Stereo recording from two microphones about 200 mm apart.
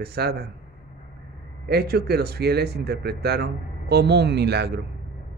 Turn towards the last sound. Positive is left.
turn(degrees=-55)  # may be behind; listen again after turning